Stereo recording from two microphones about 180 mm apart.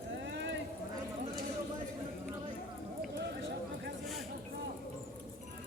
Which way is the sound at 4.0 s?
Centre (ahead or behind).